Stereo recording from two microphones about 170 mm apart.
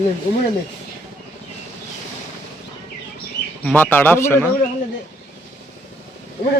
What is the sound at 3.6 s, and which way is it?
Speech, 10° left (ahead or behind).